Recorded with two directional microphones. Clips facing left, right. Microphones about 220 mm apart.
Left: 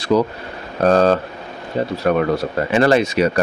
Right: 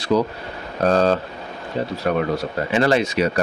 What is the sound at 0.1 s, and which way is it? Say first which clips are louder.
Speech: left 3 dB; 55° left (ahead or behind).